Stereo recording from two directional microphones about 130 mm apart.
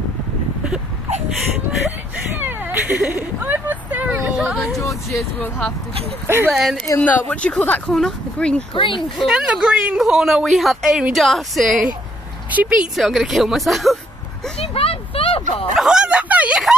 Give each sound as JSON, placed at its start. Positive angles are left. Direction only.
{"t": 2.3, "sound": "cat", "side_deg": -15}
{"t": 4.7, "sound": "speech", "side_deg": 25}
{"t": 6.2, "sound": "speech", "side_deg": -20}
{"t": 6.5, "sound": "speech", "side_deg": 0}
{"t": 7.0, "sound": "speech", "side_deg": 10}
{"t": 8.7, "sound": "speech", "side_deg": 40}
{"t": 9.2, "sound": "speech", "side_deg": -5}
{"t": 14.6, "sound": "a sound", "side_deg": 45}
{"t": 15.7, "sound": "a sound", "side_deg": -5}